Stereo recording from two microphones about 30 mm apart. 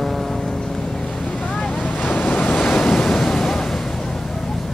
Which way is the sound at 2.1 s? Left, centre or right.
Left.